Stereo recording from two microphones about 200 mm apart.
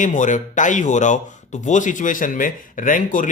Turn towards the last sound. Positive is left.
turn(degrees=40)  # may be behind; listen again after turning